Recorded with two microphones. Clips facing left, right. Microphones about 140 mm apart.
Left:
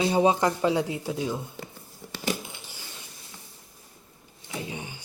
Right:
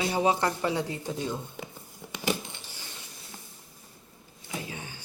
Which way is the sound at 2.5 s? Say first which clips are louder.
Left 1 dB; 15° left (ahead or behind).